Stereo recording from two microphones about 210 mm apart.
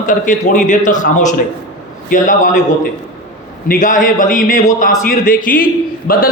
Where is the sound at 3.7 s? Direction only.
40° left (ahead or behind).